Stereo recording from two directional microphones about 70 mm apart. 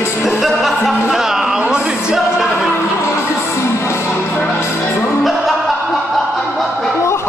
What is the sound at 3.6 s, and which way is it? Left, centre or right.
Music, left.